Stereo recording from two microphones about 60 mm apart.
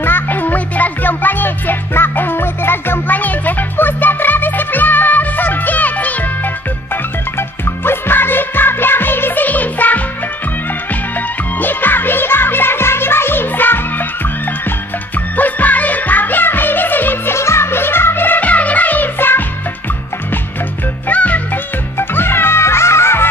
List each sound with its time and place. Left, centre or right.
0.0 s music: left
7.3 s music: left
11.1 s music: left
15.3 s music: left
17.4 s music: left
21.1 s music: left
21.9 s music: left